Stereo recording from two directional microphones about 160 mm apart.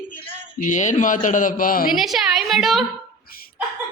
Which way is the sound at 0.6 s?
50° left (ahead or behind).